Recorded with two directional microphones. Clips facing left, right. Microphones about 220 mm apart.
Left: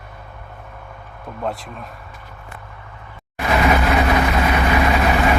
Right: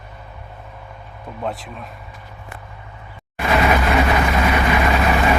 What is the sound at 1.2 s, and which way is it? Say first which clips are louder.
Speech: left 1 dB; centre (ahead or behind).